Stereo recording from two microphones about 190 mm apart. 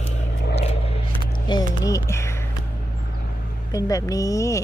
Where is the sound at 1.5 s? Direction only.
20° left (ahead or behind).